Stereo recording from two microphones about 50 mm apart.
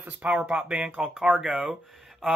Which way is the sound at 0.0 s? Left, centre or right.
Right.